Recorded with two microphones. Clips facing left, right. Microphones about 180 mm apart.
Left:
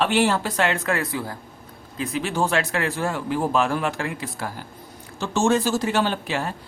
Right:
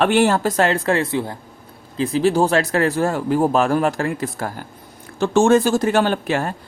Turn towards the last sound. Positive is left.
turn(degrees=-50)  # may be behind; listen again after turning